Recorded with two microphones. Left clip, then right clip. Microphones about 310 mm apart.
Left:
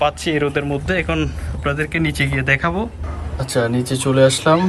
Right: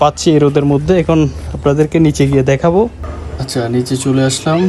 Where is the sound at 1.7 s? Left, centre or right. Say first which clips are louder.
Right 9 dB; centre.